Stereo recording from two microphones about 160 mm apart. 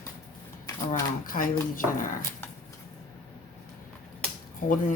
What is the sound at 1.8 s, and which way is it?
Speech, 15° left (ahead or behind).